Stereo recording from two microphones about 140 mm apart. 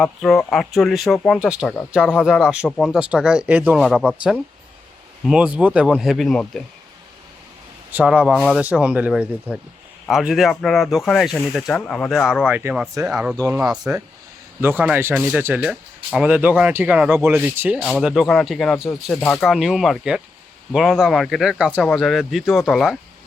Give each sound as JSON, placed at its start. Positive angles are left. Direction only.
{"t": 0.0, "sound": "speech", "side_deg": 5}
{"t": 1.6, "sound": "speech", "side_deg": 10}
{"t": 1.9, "sound": "speech", "side_deg": -5}
{"t": 7.9, "sound": "speech", "side_deg": -10}
{"t": 8.2, "sound": "speech", "side_deg": 0}
{"t": 13.3, "sound": "speech", "side_deg": -25}
{"t": 13.6, "sound": "speech", "side_deg": -5}
{"t": 17.8, "sound": "speech", "side_deg": 0}
{"t": 19.5, "sound": "speech", "side_deg": 0}